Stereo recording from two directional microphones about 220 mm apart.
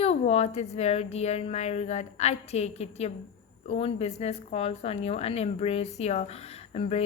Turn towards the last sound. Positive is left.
turn(degrees=30)  # may be behind; listen again after turning